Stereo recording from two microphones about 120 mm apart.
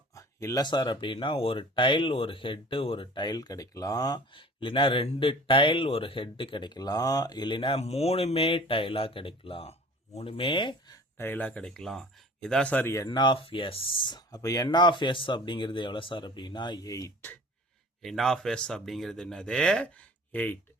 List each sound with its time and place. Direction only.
0.1 s a sound: 25° left (ahead or behind)
0.6 s speech: 40° left (ahead or behind)
4.4 s speech: 45° left (ahead or behind)
10.9 s speech: 20° left (ahead or behind)
13.1 s speech: 40° left (ahead or behind)
18.0 s speech: centre (ahead or behind)